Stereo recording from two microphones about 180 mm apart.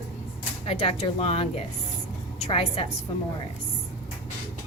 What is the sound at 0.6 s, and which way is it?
A woman's voice, 35° left (ahead or behind).